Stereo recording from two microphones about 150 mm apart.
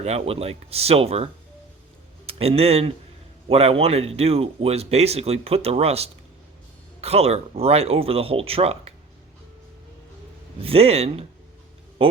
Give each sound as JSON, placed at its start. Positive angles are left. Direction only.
{"t": 0.0, "sound": "speech", "side_deg": -45}
{"t": 10.6, "sound": "speech", "side_deg": -40}